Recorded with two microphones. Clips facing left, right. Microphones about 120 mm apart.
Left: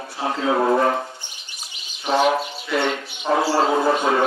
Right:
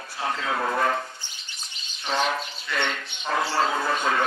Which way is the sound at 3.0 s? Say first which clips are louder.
Left 4 dB; 5° left (ahead or behind).